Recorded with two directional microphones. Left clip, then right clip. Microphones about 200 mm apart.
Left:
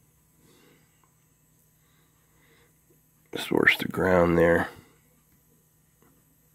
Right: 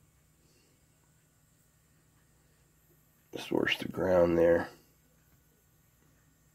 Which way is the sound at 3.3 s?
35° left (ahead or behind).